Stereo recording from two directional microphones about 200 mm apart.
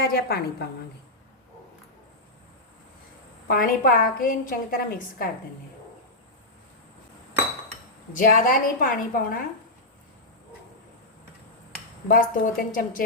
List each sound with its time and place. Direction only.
0.1 s a woman's voice: 50° left (ahead or behind)
3.4 s a woman's voice: 45° left (ahead or behind)
8.1 s a woman's voice: 45° left (ahead or behind)
12.0 s a woman's voice: 45° left (ahead or behind)